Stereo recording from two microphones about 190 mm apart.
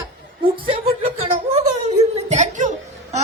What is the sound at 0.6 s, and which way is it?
Speech, 30° right (ahead or behind).